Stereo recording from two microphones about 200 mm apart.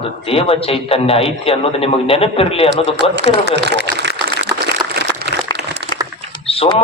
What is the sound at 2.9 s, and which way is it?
Speech, 60° right (ahead or behind).